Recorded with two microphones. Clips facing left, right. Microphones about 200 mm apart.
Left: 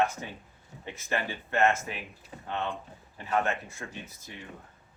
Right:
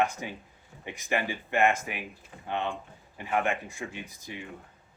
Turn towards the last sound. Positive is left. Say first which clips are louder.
# right 3 dB
turn(degrees=-15)  # may be behind; listen again after turning